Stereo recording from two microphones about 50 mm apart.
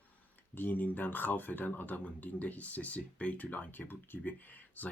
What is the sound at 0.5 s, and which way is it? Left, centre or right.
Speech, left.